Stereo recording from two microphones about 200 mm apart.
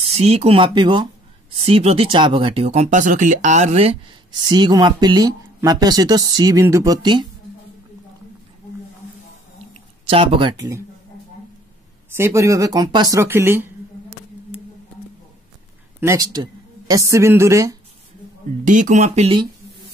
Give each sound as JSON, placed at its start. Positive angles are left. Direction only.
{"t": 0.1, "sound": "speech", "side_deg": -30}
{"t": 4.5, "sound": "speech", "side_deg": -20}
{"t": 9.6, "sound": "a sound", "side_deg": -25}
{"t": 12.1, "sound": "speech", "side_deg": -15}
{"t": 16.0, "sound": "a woman's voice", "side_deg": -15}
{"t": 18.6, "sound": "speech", "side_deg": -40}